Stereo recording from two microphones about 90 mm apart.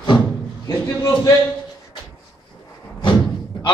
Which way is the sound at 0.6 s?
40° left (ahead or behind).